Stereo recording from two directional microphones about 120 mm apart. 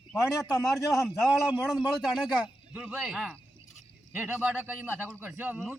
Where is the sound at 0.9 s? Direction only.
Centre (ahead or behind).